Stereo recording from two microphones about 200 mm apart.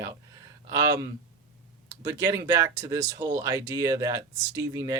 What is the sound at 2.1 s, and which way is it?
Speech, 15° right (ahead or behind).